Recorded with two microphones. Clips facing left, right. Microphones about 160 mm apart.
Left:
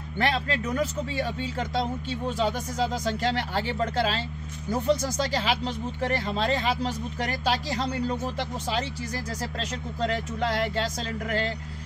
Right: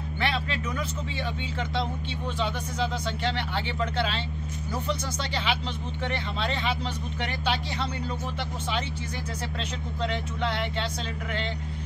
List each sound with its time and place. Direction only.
0.2 s speech: 40° left (ahead or behind)
10.0 s speech: 40° left (ahead or behind)